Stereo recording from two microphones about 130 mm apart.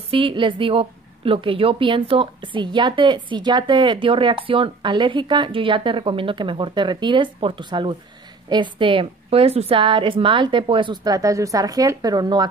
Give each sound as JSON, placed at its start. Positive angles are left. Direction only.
{"t": 0.1, "sound": "a woman's voice", "side_deg": -40}